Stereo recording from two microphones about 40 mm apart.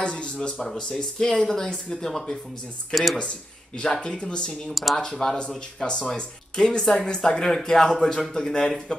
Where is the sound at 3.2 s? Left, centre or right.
Left.